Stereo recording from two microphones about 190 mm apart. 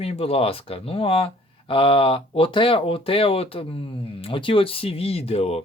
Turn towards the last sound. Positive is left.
turn(degrees=30)  # may be behind; listen again after turning